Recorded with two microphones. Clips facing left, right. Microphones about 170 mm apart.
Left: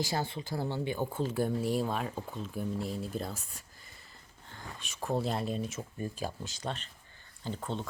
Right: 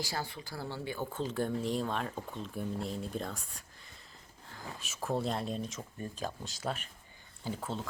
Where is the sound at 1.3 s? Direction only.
10° left (ahead or behind).